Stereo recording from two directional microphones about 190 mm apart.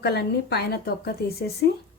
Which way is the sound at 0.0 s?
60° left (ahead or behind).